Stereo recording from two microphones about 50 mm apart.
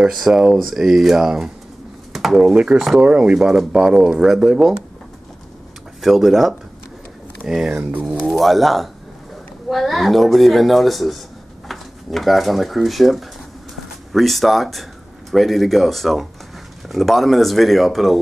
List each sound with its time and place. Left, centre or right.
0.0 s speech: centre
2.5 s speech: right
3.3 s speech: centre
5.9 s speech: centre
7.4 s speech: centre
8.3 s speech: centre